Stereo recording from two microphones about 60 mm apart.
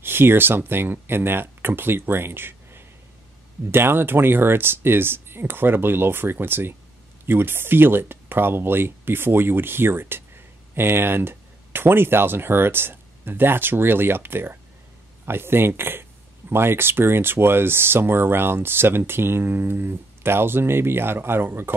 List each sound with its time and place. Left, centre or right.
0.0 s speech: right